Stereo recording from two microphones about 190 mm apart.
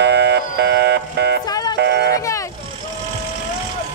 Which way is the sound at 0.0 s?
65° right (ahead or behind).